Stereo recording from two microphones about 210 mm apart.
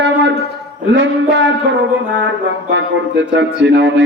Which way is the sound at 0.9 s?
60° right (ahead or behind).